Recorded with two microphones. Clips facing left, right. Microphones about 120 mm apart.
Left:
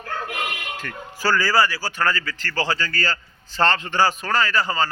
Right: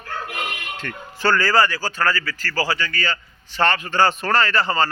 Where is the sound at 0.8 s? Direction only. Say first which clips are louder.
Right 2 dB; 5° left (ahead or behind); by 3.9 s 30° left (ahead or behind).